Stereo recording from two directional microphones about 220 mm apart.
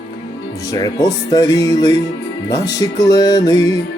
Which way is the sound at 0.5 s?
15° left (ahead or behind).